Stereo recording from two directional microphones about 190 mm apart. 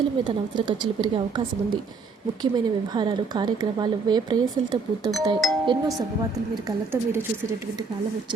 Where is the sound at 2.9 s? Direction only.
25° right (ahead or behind).